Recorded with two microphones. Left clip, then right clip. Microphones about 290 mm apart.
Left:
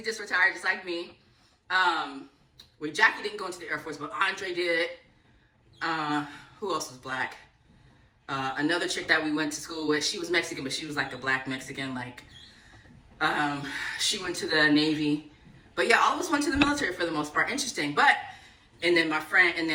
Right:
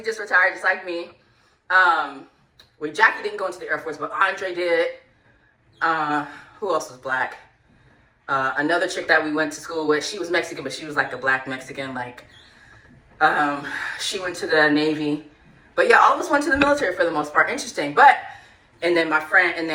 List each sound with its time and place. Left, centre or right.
0.0 s speech: centre
2.8 s speech: centre
13.1 s speech: centre